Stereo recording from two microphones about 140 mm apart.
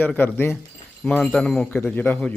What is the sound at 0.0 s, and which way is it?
A man's voice, 15° left (ahead or behind).